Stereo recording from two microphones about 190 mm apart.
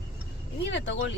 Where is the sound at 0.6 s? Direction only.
70° left (ahead or behind).